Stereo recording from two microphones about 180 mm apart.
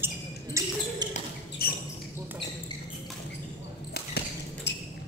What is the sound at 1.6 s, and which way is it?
Basketball bounce, 55° left (ahead or behind).